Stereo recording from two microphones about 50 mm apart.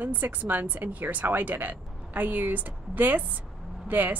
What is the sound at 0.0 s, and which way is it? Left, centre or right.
A woman's voice, right.